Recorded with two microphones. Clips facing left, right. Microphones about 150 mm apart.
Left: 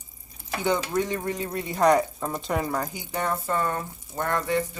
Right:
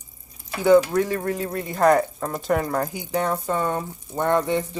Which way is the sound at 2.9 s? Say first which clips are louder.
Right 4 dB; 10° right (ahead or behind).